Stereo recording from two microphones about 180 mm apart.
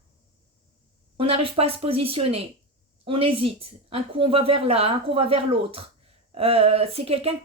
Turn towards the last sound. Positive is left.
turn(degrees=-35)  # may be behind; listen again after turning